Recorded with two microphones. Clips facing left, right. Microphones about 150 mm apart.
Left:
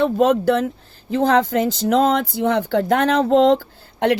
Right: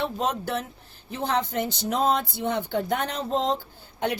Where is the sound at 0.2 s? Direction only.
80° left.